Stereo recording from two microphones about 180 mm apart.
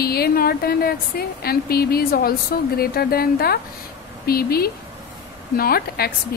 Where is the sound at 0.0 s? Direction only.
60° left (ahead or behind).